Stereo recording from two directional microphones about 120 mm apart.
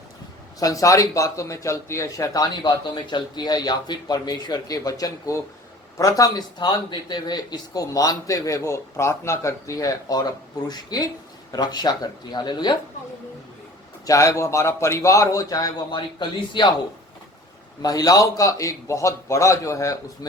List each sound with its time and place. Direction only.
0.6 s speech: 30° left (ahead or behind)
14.0 s speech: 25° left (ahead or behind)
17.8 s speech: 30° left (ahead or behind)